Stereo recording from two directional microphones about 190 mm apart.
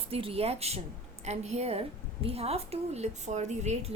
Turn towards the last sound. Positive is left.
turn(degrees=-35)  # may be behind; listen again after turning